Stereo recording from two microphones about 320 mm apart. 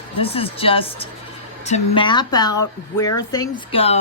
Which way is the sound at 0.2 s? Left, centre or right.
Centre.